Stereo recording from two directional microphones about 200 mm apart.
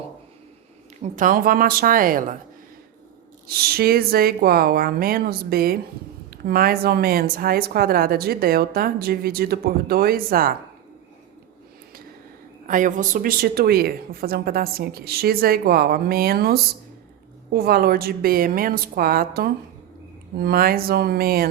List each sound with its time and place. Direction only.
1.0 s a woman's voice: 40° right (ahead or behind)
3.4 s a woman's voice: 50° right (ahead or behind)
12.6 s a woman's voice: 40° right (ahead or behind)